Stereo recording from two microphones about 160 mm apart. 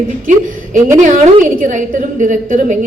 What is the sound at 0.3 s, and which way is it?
A woman's voice, 50° right (ahead or behind).